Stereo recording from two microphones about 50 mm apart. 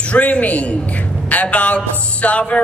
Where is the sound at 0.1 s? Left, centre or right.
Left.